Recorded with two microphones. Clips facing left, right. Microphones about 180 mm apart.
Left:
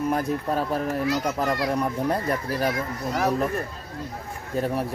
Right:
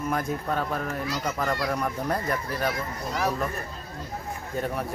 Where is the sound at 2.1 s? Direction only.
30° left (ahead or behind).